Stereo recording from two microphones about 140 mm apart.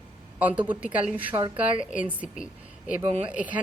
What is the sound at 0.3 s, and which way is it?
Speech, 10° right (ahead or behind).